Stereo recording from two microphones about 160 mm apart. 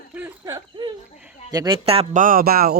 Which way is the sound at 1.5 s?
25° right (ahead or behind).